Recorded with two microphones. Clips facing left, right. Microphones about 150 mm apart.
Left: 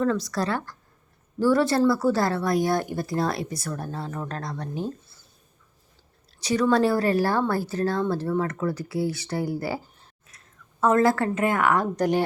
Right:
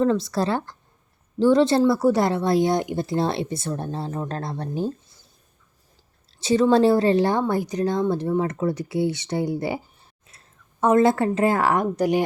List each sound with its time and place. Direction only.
0.0 s speech: 25° right (ahead or behind)
6.4 s a woman's voice: 25° right (ahead or behind)
11.8 s speech: 10° right (ahead or behind)